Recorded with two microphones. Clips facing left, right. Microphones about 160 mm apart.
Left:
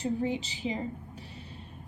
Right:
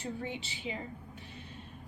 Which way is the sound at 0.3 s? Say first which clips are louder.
Left 7 dB; 40° left (ahead or behind).